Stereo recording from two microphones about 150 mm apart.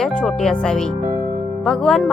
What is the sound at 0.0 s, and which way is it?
Speech, 5° left (ahead or behind).